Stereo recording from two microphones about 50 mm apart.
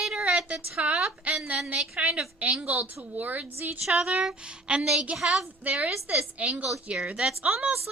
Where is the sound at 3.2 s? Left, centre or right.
Right.